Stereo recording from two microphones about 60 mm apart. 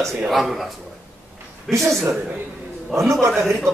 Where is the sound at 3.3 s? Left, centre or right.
Centre.